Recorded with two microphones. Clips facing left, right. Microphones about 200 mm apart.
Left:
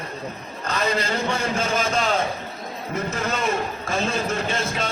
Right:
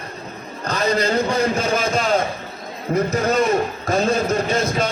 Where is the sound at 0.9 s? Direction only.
40° right (ahead or behind).